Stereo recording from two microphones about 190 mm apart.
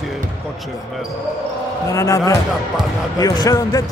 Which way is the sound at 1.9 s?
15° left (ahead or behind).